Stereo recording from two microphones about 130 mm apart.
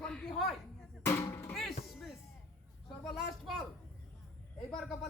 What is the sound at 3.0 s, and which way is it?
Speech, centre (ahead or behind).